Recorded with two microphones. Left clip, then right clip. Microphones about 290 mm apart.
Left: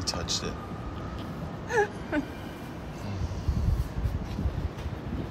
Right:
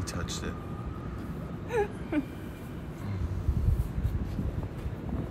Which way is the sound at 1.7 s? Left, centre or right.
Left.